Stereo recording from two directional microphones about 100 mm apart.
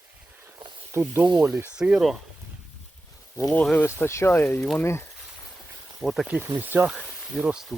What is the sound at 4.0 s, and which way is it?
Speech, 25° left (ahead or behind).